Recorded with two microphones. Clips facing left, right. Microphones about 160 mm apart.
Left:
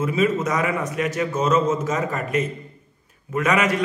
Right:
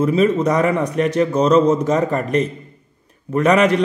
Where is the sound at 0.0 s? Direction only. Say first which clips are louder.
Right 6 dB; 35° right (ahead or behind).